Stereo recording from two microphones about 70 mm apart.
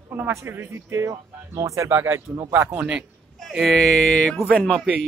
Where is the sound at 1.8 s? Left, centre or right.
Right.